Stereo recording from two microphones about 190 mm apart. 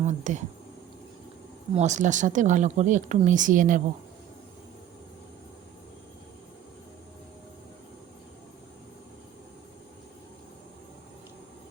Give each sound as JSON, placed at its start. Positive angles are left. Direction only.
{"t": 0.0, "sound": "speech", "side_deg": -40}
{"t": 1.7, "sound": "speech", "side_deg": -40}